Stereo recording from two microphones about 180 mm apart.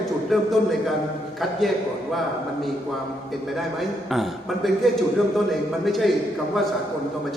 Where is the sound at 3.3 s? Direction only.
Centre (ahead or behind).